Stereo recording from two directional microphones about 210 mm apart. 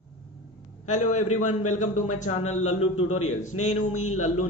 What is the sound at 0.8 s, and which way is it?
Speech, 35° left (ahead or behind).